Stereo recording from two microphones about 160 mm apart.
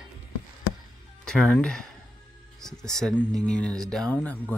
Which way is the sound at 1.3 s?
5° left (ahead or behind).